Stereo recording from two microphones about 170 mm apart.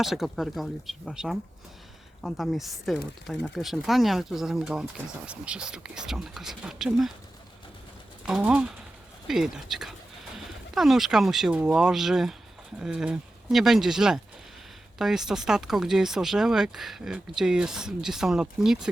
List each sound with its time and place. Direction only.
0.0 s speech: centre (ahead or behind)
8.2 s speech: 5° right (ahead or behind)